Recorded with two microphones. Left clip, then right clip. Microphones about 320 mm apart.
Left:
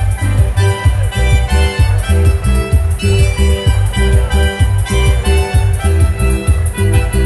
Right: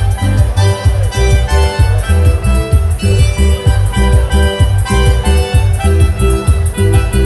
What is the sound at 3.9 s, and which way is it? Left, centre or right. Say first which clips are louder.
Music: right 1 dB; right.